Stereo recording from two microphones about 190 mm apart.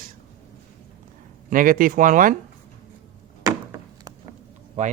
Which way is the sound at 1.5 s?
45° right (ahead or behind).